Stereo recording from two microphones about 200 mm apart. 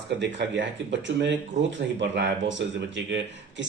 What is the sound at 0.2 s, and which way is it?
Speech, 60° right (ahead or behind).